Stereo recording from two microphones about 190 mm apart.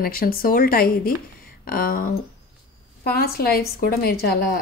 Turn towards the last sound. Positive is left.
turn(degrees=55)  # may be behind; listen again after turning